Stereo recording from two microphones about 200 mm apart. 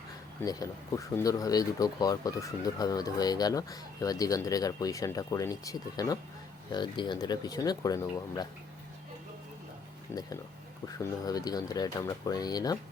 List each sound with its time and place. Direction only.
0.4 s speech: 15° left (ahead or behind)
10.9 s speech: 20° left (ahead or behind)